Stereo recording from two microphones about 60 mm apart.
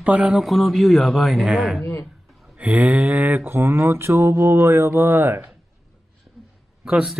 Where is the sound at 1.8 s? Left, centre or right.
Left.